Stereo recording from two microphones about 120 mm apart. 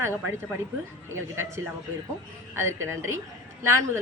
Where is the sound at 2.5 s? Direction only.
20° right (ahead or behind).